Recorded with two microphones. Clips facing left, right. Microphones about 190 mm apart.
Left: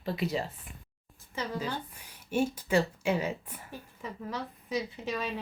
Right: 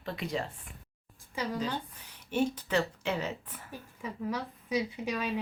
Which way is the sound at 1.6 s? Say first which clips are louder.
Right 1 dB; 10° left (ahead or behind).